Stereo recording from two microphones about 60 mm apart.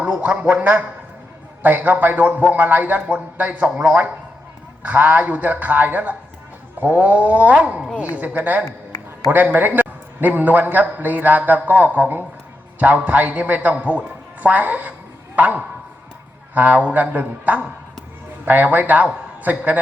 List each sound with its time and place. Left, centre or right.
0.0 s a man's voice: right
8.6 s a sound: left
9.3 s a man's voice: right